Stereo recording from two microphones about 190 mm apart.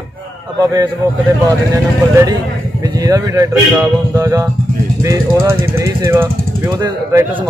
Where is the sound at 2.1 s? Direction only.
15° right (ahead or behind).